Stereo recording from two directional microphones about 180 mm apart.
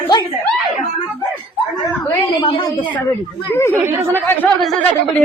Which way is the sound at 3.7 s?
10° right (ahead or behind).